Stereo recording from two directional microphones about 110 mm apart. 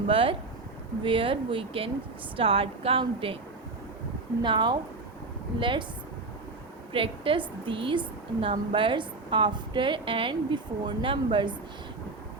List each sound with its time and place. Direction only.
0.1 s a woman's voice: 55° right (ahead or behind)
4.4 s a woman's voice: 45° right (ahead or behind)
6.9 s a woman's voice: 55° right (ahead or behind)